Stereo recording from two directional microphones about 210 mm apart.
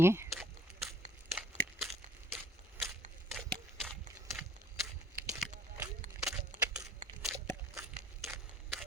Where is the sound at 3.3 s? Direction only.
Centre (ahead or behind).